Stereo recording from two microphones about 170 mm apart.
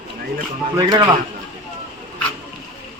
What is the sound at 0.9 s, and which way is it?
Speech, 25° right (ahead or behind).